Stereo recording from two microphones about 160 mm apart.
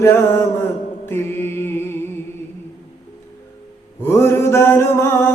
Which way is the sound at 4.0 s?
15° left (ahead or behind).